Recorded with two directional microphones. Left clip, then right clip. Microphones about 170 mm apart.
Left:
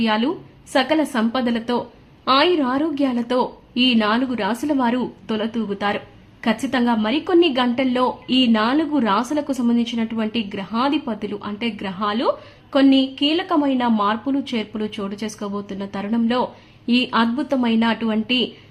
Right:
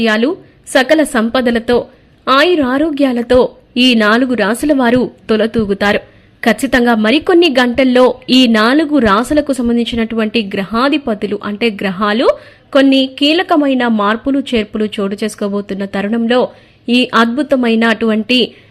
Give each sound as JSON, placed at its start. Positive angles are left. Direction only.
{"t": 0.0, "sound": "a woman's voice", "side_deg": -25}